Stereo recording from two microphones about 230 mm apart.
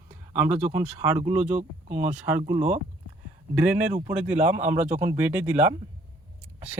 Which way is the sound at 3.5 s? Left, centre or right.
Centre.